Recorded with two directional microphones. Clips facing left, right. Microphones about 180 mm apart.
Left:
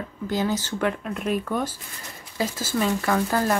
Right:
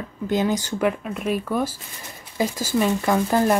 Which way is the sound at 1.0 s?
5° right (ahead or behind).